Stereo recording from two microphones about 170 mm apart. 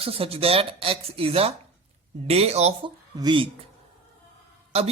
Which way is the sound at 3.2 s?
30° right (ahead or behind).